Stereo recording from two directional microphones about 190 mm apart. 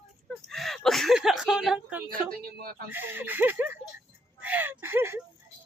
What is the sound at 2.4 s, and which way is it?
Speech, 50° right (ahead or behind).